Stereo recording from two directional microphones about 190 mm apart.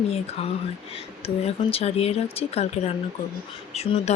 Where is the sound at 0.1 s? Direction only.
30° left (ahead or behind).